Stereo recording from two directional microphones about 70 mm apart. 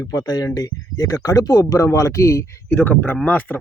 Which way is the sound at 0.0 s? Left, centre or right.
Left.